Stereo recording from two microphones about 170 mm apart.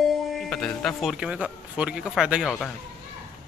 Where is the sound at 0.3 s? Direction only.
Centre (ahead or behind).